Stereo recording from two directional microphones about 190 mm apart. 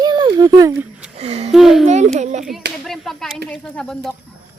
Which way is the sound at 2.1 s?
40° right (ahead or behind).